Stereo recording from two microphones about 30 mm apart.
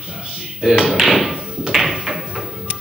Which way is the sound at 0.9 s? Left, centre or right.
Centre.